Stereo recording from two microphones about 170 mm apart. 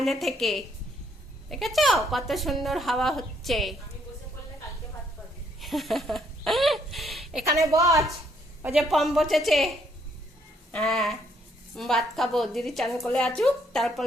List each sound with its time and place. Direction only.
0.0 s a woman's voice: centre (ahead or behind)
5.5 s a sound: centre (ahead or behind)
7.6 s a woman's voice: 20° right (ahead or behind)
8.7 s a woman's voice: centre (ahead or behind)